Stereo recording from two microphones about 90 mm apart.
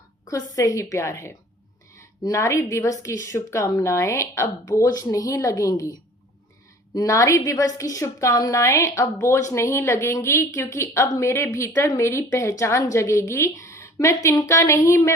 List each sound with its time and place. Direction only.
0.3 s a woman's voice: 40° left (ahead or behind)